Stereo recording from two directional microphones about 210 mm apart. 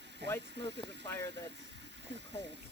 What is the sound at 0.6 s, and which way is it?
Speech, 55° right (ahead or behind).